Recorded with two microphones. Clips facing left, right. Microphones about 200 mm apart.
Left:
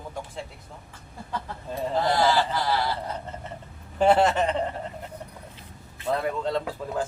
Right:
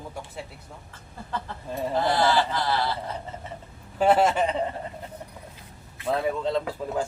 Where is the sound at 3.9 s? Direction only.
5° right (ahead or behind).